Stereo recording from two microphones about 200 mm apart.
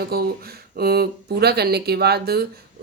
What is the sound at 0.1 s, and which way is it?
Speech, 50° right (ahead or behind).